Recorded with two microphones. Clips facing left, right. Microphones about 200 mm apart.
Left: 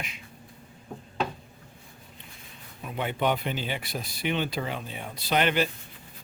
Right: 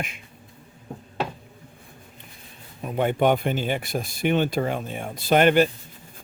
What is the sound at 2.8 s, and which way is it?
Speech, 45° right (ahead or behind).